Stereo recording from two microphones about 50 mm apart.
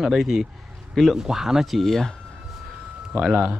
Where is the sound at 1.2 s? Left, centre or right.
Centre.